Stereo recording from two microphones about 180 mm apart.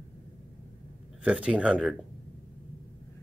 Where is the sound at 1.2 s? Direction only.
5° right (ahead or behind).